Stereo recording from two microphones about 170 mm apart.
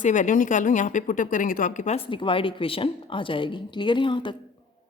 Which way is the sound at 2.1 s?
30° left (ahead or behind).